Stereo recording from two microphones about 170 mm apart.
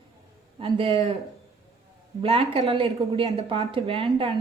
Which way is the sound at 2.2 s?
35° right (ahead or behind).